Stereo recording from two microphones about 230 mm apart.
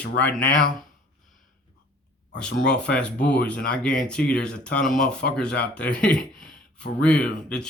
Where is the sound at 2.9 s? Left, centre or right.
Centre.